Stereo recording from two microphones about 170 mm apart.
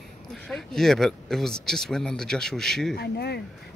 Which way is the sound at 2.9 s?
70° left (ahead or behind).